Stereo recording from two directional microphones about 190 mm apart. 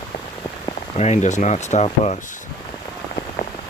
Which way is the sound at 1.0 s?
35° left (ahead or behind).